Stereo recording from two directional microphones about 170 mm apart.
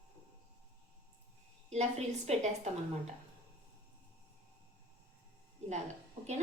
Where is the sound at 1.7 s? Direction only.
40° right (ahead or behind).